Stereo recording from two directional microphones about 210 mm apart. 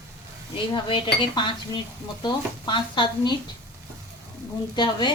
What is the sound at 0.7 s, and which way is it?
Speech, 25° left (ahead or behind).